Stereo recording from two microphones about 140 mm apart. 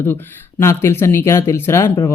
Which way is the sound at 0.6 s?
20° left (ahead or behind).